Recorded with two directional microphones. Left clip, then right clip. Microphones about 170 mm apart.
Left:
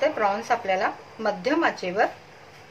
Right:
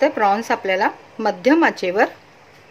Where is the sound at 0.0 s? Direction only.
70° right (ahead or behind).